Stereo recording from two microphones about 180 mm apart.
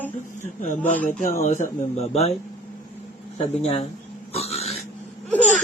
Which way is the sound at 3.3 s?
35° left (ahead or behind).